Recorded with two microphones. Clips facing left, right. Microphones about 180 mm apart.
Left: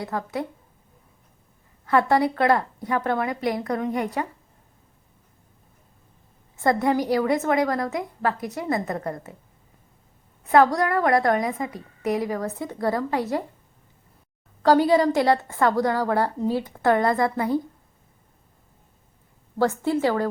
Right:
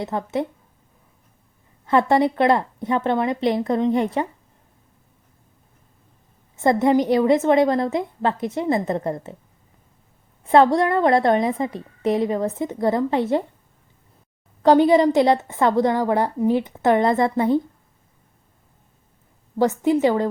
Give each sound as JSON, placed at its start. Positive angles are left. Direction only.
{"t": 0.0, "sound": "a woman's voice", "side_deg": -25}
{"t": 1.9, "sound": "a woman's voice", "side_deg": -25}
{"t": 6.6, "sound": "a woman's voice", "side_deg": -25}
{"t": 10.4, "sound": "a woman's voice", "side_deg": -25}
{"t": 14.6, "sound": "a woman's voice", "side_deg": -20}
{"t": 19.5, "sound": "a woman's voice", "side_deg": -20}